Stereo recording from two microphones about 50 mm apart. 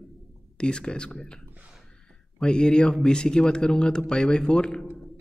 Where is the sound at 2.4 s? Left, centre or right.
Centre.